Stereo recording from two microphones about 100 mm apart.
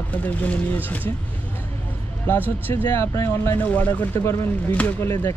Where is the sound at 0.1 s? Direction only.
15° left (ahead or behind).